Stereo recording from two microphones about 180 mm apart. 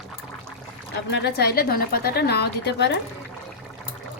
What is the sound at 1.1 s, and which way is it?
A woman's voice, 65° left (ahead or behind).